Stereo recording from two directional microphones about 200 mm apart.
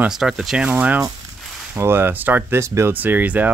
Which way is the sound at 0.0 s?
Centre (ahead or behind).